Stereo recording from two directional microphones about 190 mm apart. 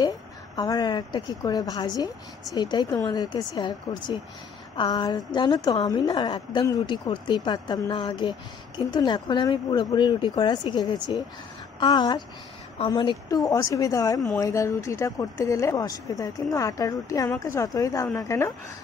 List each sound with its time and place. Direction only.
0.6 s a woman's voice: 20° left (ahead or behind)